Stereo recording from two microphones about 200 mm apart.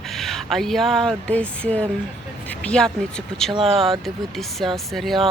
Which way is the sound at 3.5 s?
30° right (ahead or behind).